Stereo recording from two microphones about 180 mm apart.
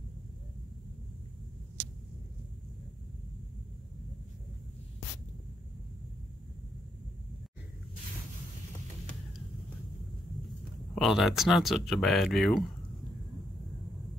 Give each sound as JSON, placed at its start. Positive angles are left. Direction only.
{"t": 11.0, "sound": "speech", "side_deg": 0}